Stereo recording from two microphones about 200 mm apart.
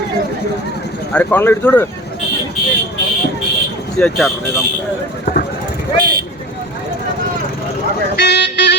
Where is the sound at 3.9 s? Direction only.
Centre (ahead or behind).